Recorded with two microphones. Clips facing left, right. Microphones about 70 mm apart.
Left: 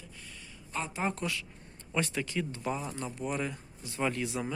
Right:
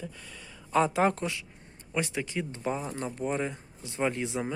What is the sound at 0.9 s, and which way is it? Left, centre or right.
Speech, right.